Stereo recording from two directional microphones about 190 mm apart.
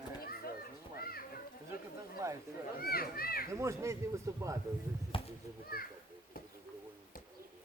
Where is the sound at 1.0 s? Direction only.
50° left (ahead or behind).